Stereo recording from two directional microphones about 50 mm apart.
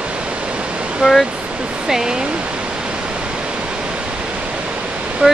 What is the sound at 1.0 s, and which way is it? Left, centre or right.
Speech, centre.